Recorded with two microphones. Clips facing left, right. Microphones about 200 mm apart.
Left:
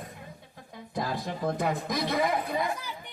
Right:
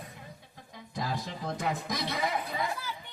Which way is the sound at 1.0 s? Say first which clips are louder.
Left 4 dB; 55° left (ahead or behind).